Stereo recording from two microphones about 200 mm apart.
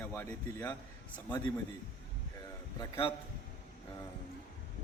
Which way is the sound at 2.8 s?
25° left (ahead or behind).